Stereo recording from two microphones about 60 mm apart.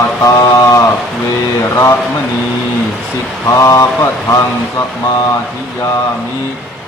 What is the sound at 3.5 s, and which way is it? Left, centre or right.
Mantra, left.